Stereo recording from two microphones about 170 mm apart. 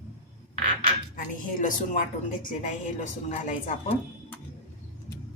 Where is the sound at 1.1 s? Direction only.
50° left (ahead or behind).